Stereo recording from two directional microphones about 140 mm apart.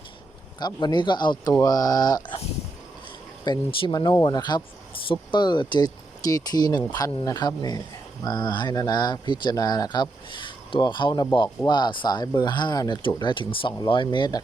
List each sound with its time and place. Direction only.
0.6 s speech: 30° left (ahead or behind)
3.4 s speech: 35° left (ahead or behind)